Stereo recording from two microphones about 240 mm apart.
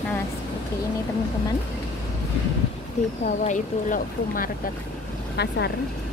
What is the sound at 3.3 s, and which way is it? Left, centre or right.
Speech, left.